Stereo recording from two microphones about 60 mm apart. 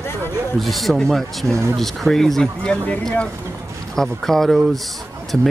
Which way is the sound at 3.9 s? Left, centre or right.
Centre.